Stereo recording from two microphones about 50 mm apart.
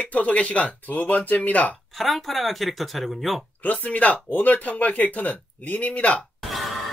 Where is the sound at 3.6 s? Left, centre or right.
Left.